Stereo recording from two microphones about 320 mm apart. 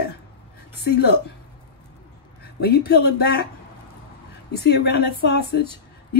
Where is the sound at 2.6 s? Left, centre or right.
Left.